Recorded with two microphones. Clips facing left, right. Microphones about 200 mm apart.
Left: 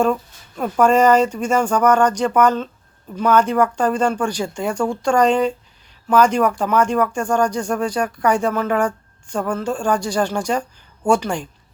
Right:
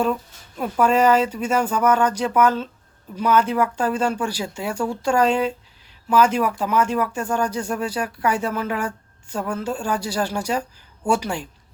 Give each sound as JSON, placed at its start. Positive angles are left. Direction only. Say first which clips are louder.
{"t": 0.8, "sound": "speech", "louder": "left 3 dB", "side_deg": 45}
{"t": 1.3, "sound": "speech", "louder": "left 3 dB", "side_deg": -5}